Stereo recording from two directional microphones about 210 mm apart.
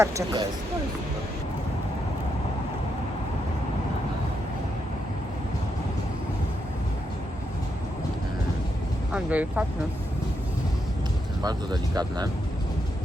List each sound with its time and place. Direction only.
0.0 s speech: 15° right (ahead or behind)
9.1 s speech: 5° right (ahead or behind)
11.4 s speech: 20° right (ahead or behind)